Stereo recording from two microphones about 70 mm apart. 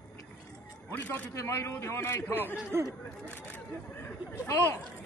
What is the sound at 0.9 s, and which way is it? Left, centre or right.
Speech, left.